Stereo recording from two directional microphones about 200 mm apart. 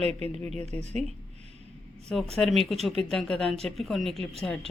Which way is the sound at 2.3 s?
Centre (ahead or behind).